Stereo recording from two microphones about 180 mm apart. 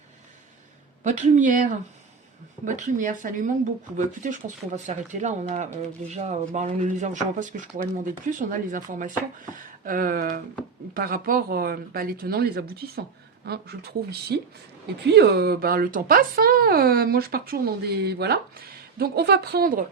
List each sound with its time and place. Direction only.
1.0 s speech: 40° right (ahead or behind)